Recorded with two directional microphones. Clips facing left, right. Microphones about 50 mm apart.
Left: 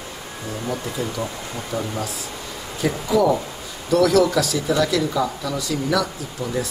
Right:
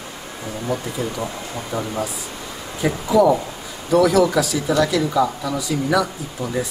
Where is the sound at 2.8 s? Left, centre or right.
Centre.